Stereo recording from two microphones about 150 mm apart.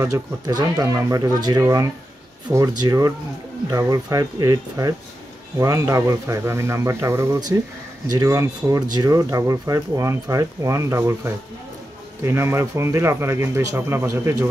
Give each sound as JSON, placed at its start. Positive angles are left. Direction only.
{"t": 0.0, "sound": "a man's voice", "side_deg": -25}